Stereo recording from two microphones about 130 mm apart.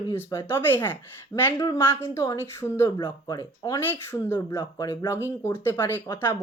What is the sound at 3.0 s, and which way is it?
Speech, 35° left (ahead or behind).